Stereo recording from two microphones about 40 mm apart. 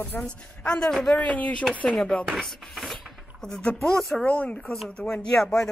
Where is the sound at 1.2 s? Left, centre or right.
Left.